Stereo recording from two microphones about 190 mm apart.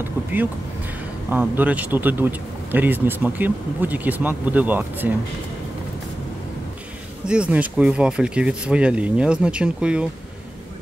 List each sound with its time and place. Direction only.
1.3 s speech: 10° right (ahead or behind)
7.2 s speech: 5° right (ahead or behind)